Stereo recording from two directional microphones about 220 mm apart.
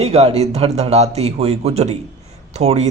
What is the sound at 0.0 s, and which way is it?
A man's voice, 30° right (ahead or behind).